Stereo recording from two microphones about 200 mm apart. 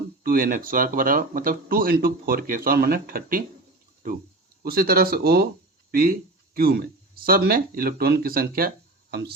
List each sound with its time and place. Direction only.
0.2 s speech: 45° right (ahead or behind)
4.6 s speech: 50° right (ahead or behind)